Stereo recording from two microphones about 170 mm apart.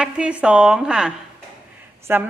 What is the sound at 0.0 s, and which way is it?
A woman's voice, 5° right (ahead or behind).